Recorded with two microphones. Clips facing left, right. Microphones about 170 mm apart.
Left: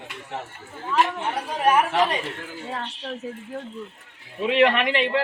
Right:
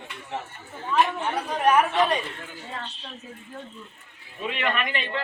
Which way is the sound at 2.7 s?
70° left (ahead or behind).